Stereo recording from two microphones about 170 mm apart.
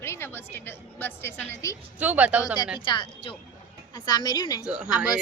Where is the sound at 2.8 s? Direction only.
30° left (ahead or behind).